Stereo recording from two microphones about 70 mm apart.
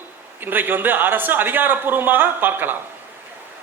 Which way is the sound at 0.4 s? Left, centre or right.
Right.